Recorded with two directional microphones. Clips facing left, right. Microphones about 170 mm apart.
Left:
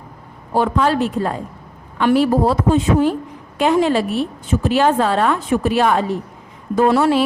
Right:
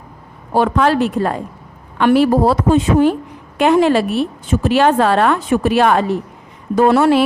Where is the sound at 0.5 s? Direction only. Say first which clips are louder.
Right 3 dB; 70° right (ahead or behind).